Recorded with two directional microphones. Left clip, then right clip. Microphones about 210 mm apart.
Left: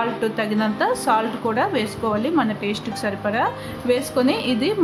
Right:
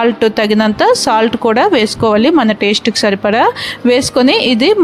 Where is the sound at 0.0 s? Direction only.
45° right (ahead or behind).